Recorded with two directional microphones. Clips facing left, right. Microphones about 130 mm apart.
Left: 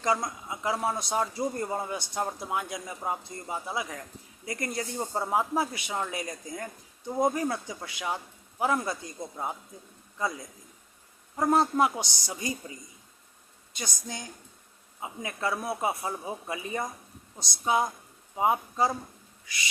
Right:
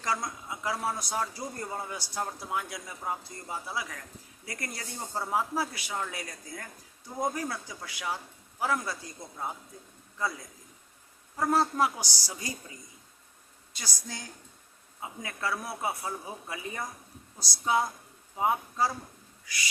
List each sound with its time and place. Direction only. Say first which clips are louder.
0.0 s speech: left 4 dB; 20° left (ahead or behind)
11.3 s speech: left 3 dB; 20° left (ahead or behind)
13.7 s speech: left 4 dB; 20° left (ahead or behind)